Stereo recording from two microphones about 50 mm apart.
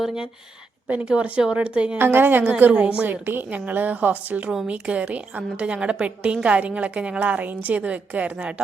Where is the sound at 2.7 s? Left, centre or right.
Right.